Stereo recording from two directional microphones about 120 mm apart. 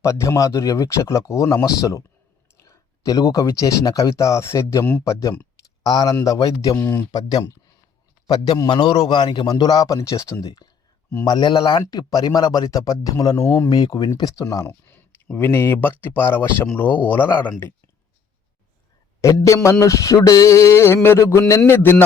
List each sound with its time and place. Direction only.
0.0 s speech: 25° left (ahead or behind)
5.8 s a man's voice: 35° left (ahead or behind)
6.7 s speech: 15° left (ahead or behind)
7.1 s a man's voice: 30° left (ahead or behind); by 17.2 s 15° left (ahead or behind)
19.2 s speech: 25° left (ahead or behind)